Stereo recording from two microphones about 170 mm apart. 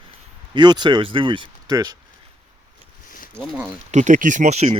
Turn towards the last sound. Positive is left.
turn(degrees=-40)  # may be behind; listen again after turning